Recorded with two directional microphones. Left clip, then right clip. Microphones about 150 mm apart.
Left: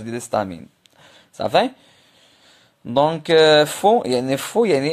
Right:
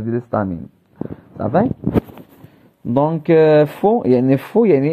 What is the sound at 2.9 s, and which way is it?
Speech, centre (ahead or behind).